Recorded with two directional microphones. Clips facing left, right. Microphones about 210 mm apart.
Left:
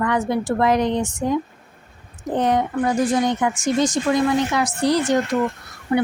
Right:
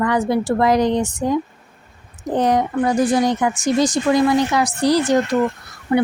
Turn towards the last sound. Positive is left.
turn(degrees=-35)  # may be behind; listen again after turning